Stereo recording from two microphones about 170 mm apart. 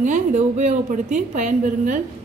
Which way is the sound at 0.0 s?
45° right (ahead or behind).